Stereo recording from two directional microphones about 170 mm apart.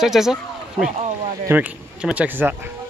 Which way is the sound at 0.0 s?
5° right (ahead or behind).